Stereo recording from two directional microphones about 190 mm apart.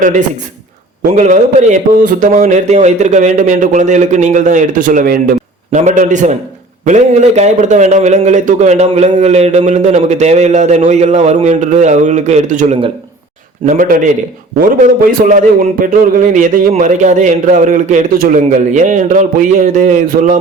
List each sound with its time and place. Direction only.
1.1 s a man's voice: 40° right (ahead or behind)
13.7 s a man's voice: 45° right (ahead or behind)
15.3 s a man's voice: 45° right (ahead or behind)